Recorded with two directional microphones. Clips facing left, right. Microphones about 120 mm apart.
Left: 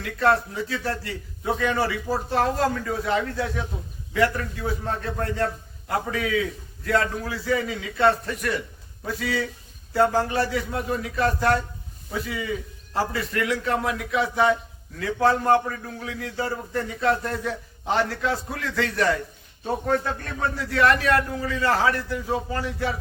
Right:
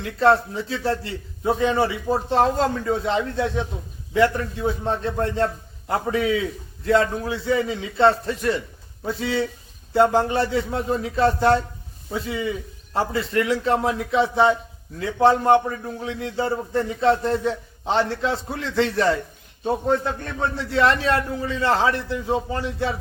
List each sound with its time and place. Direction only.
0.0 s a man's voice: 25° right (ahead or behind)